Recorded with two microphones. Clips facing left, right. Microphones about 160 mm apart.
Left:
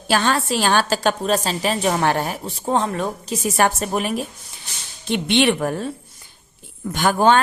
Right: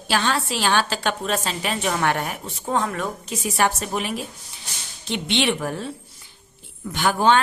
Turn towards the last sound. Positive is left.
turn(degrees=45)  # may be behind; listen again after turning